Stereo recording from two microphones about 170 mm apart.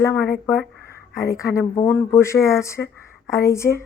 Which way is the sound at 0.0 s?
15° left (ahead or behind).